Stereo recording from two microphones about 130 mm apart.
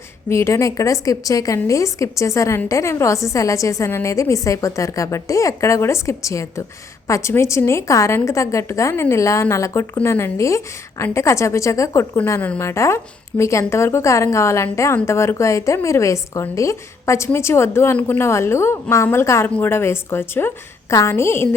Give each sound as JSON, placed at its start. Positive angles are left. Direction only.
{"t": 0.3, "sound": "a woman's voice", "side_deg": 20}